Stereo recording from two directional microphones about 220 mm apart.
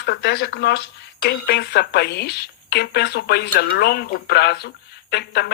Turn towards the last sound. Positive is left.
turn(degrees=45)  # may be behind; listen again after turning